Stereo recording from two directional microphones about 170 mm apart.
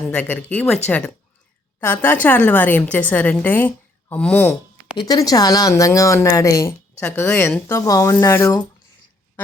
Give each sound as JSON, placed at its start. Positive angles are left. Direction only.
{"t": 0.1, "sound": "speech", "side_deg": 10}
{"t": 4.9, "sound": "speech", "side_deg": 20}